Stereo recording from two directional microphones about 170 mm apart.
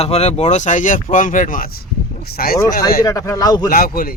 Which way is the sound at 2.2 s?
65° left (ahead or behind).